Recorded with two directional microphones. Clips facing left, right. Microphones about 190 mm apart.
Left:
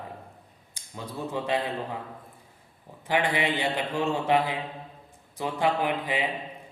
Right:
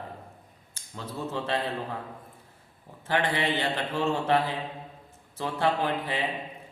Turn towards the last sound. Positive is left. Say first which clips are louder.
# left 1 dB
turn(degrees=15)  # may be behind; listen again after turning